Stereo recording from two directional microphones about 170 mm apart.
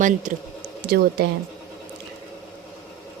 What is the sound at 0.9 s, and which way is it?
Speech, 65° right (ahead or behind).